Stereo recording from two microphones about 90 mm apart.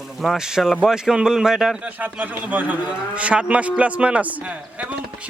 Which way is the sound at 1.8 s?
15° right (ahead or behind).